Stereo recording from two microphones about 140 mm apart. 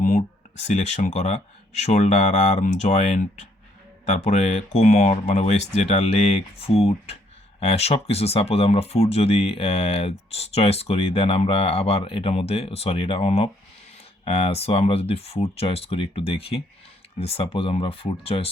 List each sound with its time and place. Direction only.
0.6 s speech: 55° left (ahead or behind)